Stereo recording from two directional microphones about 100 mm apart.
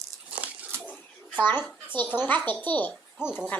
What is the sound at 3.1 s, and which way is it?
Speech, 10° right (ahead or behind).